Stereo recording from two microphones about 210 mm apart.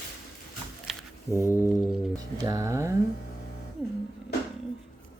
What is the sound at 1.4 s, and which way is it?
Music, 10° right (ahead or behind).